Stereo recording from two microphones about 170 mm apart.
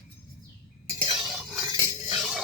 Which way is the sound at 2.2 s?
Centre (ahead or behind).